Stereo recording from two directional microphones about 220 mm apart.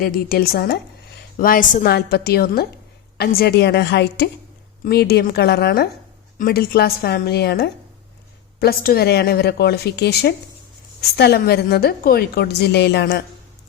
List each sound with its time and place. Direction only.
0.0 s a woman's voice: 40° left (ahead or behind)